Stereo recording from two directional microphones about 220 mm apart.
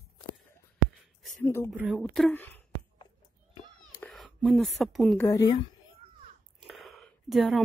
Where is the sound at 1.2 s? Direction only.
Centre (ahead or behind).